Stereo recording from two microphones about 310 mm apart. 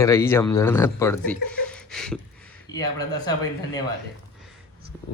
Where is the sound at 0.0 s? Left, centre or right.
Centre.